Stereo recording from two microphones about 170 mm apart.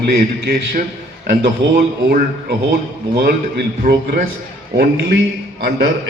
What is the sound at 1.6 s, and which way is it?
Speech, 90° right.